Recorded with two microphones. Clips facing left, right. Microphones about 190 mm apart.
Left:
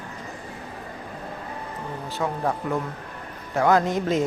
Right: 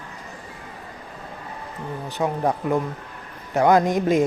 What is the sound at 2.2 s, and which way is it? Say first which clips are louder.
Speech: right 3 dB; 20° right (ahead or behind).